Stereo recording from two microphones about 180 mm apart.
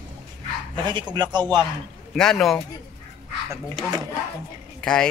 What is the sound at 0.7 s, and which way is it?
Speech, 25° right (ahead or behind).